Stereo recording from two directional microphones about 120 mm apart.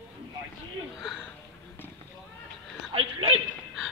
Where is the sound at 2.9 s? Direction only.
50° right (ahead or behind).